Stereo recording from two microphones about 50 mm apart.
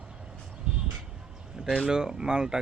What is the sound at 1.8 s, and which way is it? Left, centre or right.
Speech, centre.